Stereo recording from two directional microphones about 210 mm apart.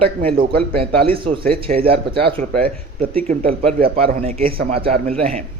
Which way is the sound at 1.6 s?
25° right (ahead or behind).